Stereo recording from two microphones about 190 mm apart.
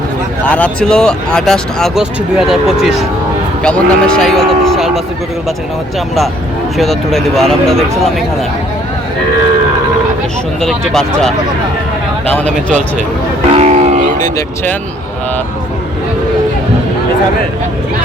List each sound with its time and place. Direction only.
0.4 s speech: 5° left (ahead or behind)
6.7 s speech: centre (ahead or behind)
10.6 s a man's voice: centre (ahead or behind)
13.5 s a sound: 35° right (ahead or behind)